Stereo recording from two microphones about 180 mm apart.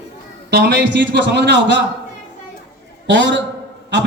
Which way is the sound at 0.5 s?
65° right (ahead or behind).